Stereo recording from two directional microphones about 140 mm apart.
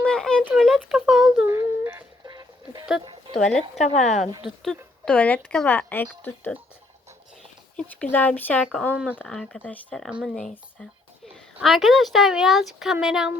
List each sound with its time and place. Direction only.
0.0 s a sound: 5° left (ahead or behind)
1.5 s a sound: 20° right (ahead or behind)
2.2 s a sound: 30° right (ahead or behind)
3.3 s speech: centre (ahead or behind)
3.8 s a woman's voice: 55° left (ahead or behind)
4.4 s speech: centre (ahead or behind)
8.1 s speech: 10° left (ahead or behind)
8.9 s speech: 10° right (ahead or behind)
9.2 s speech: 5° left (ahead or behind)
10.1 s speech: 5° right (ahead or behind)
10.3 s speech: 5° left (ahead or behind)